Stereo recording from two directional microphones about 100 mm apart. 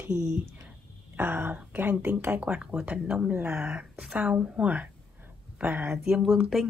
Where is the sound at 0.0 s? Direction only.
25° right (ahead or behind).